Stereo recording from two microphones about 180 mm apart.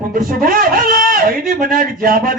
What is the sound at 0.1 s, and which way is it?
A man's voice, 50° right (ahead or behind).